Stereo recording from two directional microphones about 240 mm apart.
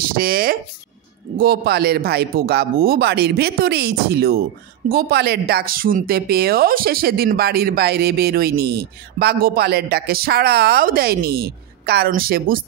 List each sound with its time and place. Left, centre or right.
0.0 s speech: right